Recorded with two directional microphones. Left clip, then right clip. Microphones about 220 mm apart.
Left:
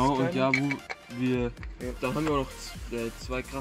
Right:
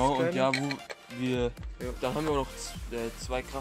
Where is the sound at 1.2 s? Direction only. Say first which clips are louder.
Left 1 dB; 20° right (ahead or behind).